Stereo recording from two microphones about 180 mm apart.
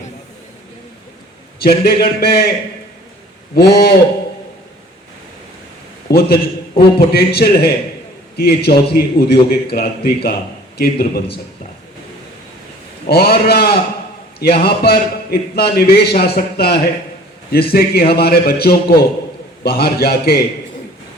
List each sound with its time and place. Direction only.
1.6 s a man's voice: 60° left (ahead or behind)
3.5 s a man's voice: 60° left (ahead or behind)
6.1 s a man's voice: 60° left (ahead or behind)
13.1 s a man's voice: 60° left (ahead or behind)